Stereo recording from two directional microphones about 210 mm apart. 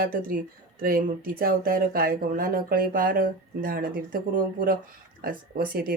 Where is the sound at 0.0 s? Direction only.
45° right (ahead or behind).